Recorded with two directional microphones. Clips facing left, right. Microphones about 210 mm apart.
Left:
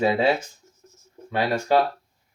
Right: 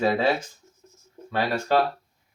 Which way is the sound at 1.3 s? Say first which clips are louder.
Left 2 dB; 15° left (ahead or behind).